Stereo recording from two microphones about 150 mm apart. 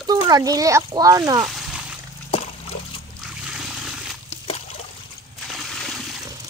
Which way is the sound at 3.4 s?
5° right (ahead or behind).